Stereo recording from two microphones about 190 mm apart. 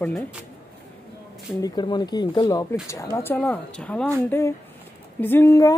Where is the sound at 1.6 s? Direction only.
20° left (ahead or behind).